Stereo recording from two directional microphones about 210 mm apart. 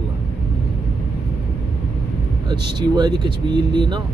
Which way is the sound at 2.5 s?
20° right (ahead or behind).